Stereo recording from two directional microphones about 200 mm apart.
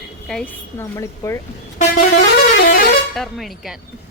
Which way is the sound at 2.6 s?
50° left (ahead or behind).